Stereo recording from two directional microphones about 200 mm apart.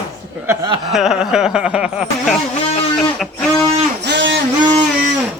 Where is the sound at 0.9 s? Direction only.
Centre (ahead or behind).